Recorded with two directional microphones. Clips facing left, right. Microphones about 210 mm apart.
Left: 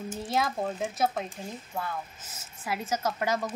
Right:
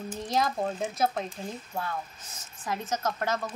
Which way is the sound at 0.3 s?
5° left (ahead or behind).